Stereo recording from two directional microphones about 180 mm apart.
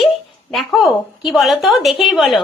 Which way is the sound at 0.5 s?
Centre (ahead or behind).